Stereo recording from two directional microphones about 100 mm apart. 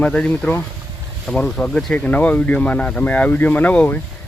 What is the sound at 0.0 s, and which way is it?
Speech, 10° left (ahead or behind).